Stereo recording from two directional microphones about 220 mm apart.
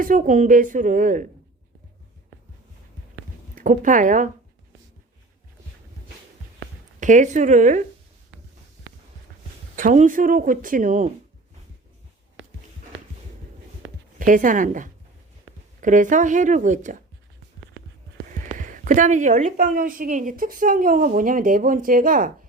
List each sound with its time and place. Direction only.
0.0 s a woman's voice: 40° right (ahead or behind)
3.5 s speech: 35° right (ahead or behind)
7.0 s a woman's voice: 35° right (ahead or behind)
9.7 s a woman's voice: 35° right (ahead or behind)
14.2 s a woman's voice: 35° right (ahead or behind)
15.5 s a sound: 65° right (ahead or behind)
15.8 s a woman's voice: 35° right (ahead or behind)
18.4 s a woman's voice: 35° right (ahead or behind)